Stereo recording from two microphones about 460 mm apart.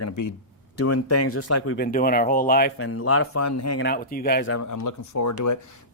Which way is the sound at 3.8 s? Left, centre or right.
Centre.